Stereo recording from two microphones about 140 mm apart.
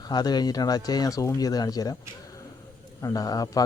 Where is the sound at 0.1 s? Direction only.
30° left (ahead or behind).